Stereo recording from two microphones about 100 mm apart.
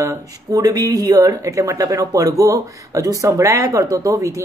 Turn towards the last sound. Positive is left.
turn(degrees=-30)  # may be behind; listen again after turning